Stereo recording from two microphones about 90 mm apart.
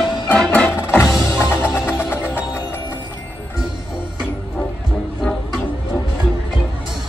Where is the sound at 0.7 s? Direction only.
25° left (ahead or behind).